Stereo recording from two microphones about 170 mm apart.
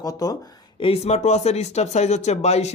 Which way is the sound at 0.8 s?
35° left (ahead or behind).